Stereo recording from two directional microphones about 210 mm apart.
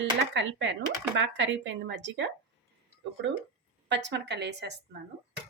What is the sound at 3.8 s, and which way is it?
Speech, 55° right (ahead or behind).